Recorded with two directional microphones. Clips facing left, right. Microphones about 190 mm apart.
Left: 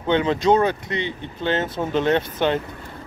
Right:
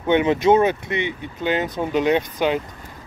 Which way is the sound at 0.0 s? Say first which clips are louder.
Right 2 dB; 15° right (ahead or behind).